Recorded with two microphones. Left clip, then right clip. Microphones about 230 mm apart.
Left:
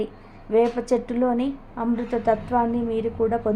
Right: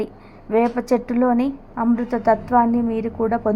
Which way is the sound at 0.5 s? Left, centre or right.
Centre.